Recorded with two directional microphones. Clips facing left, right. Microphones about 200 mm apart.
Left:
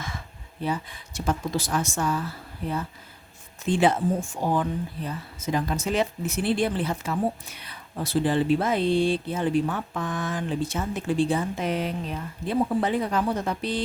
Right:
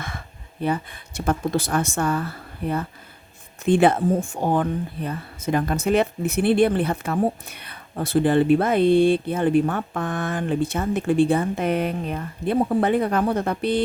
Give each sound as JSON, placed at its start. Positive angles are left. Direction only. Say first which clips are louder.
{"t": 0.6, "sound": "speech", "louder": "right 4 dB", "side_deg": -60}